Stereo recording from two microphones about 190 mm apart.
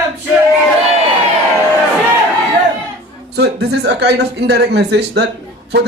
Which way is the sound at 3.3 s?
60° right (ahead or behind).